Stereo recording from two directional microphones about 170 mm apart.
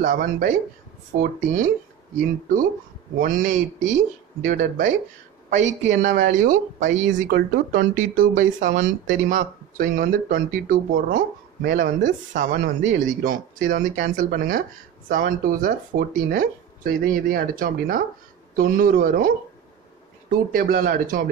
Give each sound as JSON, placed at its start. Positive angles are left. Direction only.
{"t": 0.0, "sound": "speech", "side_deg": -60}
{"t": 3.2, "sound": "speech", "side_deg": -55}
{"t": 20.5, "sound": "speech", "side_deg": -55}